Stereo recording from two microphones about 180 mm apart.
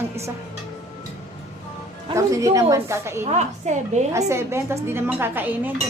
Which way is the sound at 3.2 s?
40° right (ahead or behind).